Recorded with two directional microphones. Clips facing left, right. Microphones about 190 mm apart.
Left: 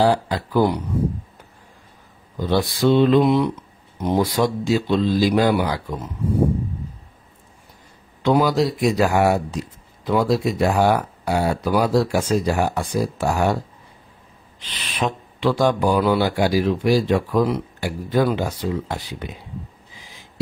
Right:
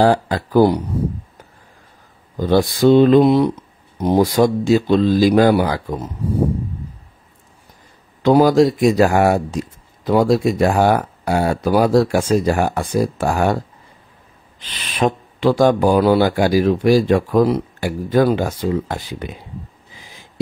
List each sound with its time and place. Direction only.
0.0 s speech: 50° right (ahead or behind)
2.3 s speech: 45° right (ahead or behind)
8.2 s speech: 40° right (ahead or behind)
15.0 s speech: 45° right (ahead or behind)